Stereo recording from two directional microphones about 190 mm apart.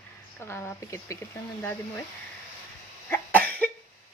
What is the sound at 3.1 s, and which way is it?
Cough, 10° left (ahead or behind).